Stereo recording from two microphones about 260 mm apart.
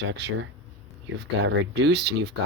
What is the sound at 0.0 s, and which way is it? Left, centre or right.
Speech, right.